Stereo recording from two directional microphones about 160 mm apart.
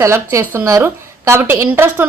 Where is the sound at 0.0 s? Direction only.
15° right (ahead or behind).